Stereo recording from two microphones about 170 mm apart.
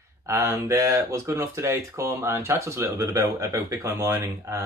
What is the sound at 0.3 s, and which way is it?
Speech, 20° right (ahead or behind).